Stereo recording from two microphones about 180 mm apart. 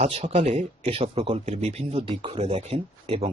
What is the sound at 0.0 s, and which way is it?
Speech, 35° right (ahead or behind).